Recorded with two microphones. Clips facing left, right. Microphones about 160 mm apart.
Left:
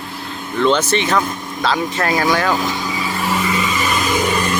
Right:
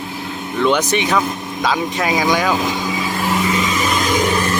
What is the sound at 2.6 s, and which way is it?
Vehicle, 15° right (ahead or behind).